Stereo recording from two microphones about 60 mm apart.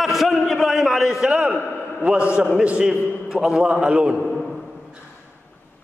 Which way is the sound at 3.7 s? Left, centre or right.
Centre.